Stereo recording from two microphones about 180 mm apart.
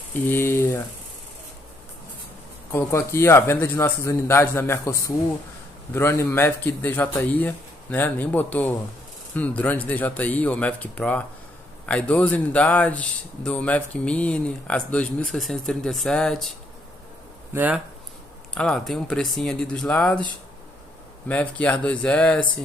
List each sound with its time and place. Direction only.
0.1 s speech: 10° left (ahead or behind)
2.7 s speech: 15° left (ahead or behind)
17.5 s speech: 10° right (ahead or behind)
18.5 s speech: 5° left (ahead or behind)
21.3 s speech: 10° left (ahead or behind)